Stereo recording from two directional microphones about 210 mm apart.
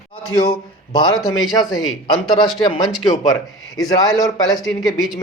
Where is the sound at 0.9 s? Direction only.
20° left (ahead or behind).